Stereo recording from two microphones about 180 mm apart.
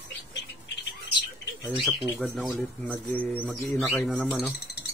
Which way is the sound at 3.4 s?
5° right (ahead or behind).